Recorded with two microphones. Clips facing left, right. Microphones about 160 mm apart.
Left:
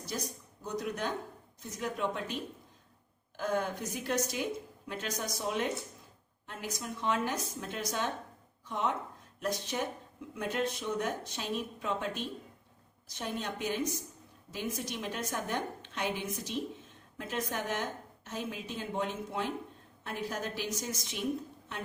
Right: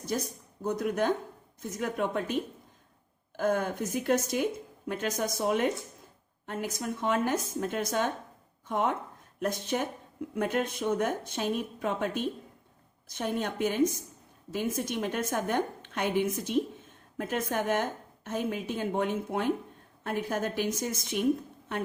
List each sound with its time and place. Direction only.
0.6 s a woman's voice: 55° right (ahead or behind)